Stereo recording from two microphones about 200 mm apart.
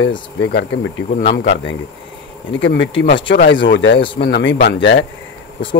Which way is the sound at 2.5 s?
65° left (ahead or behind).